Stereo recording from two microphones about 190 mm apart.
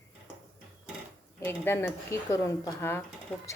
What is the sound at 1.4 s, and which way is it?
A woman's voice, 15° left (ahead or behind).